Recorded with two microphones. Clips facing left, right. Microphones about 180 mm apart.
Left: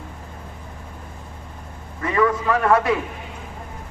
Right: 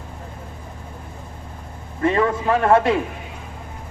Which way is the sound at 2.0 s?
30° right (ahead or behind).